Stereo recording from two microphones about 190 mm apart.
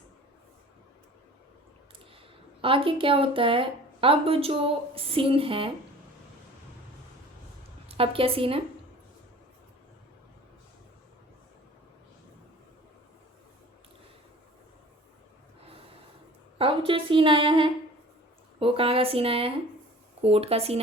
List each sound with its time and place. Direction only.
2.6 s a woman's voice: 30° right (ahead or behind)
7.9 s a woman's voice: 30° right (ahead or behind)
16.6 s a sound: 30° right (ahead or behind)
18.6 s a woman's voice: 30° right (ahead or behind)